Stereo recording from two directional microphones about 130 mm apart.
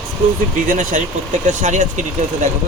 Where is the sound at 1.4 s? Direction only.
75° right (ahead or behind).